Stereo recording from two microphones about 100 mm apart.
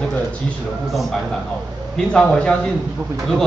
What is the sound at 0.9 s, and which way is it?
A man's voice, centre (ahead or behind).